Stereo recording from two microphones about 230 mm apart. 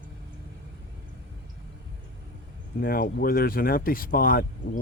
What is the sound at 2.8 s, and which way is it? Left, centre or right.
Speech, left.